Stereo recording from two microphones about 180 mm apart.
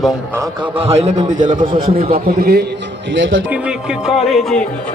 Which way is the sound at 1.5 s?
25° right (ahead or behind).